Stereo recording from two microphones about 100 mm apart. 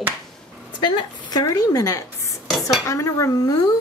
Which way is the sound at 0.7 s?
50° left (ahead or behind).